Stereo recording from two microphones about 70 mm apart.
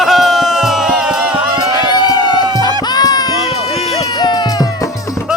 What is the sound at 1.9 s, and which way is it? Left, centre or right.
Music, left.